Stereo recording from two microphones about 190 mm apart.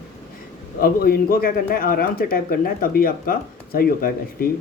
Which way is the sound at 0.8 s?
50° left (ahead or behind).